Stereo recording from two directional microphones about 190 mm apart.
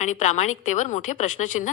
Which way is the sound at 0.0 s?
40° left (ahead or behind).